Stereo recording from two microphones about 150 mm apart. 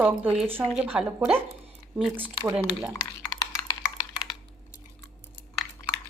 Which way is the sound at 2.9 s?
20° left (ahead or behind).